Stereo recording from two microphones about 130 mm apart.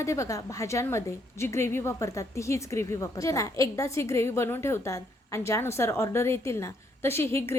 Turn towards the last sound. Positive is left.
turn(degrees=20)  # may be behind; listen again after turning